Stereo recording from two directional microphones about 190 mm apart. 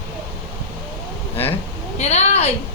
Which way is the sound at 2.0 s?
35° left (ahead or behind).